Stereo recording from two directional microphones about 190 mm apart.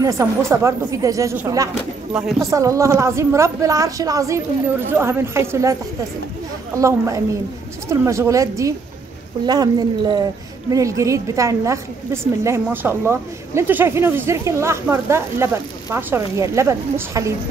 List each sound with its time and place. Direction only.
0.0 s speech: 15° right (ahead or behind)
2.1 s speech: centre (ahead or behind)
2.5 s speech: 15° right (ahead or behind)
7.9 s speech: 15° right (ahead or behind)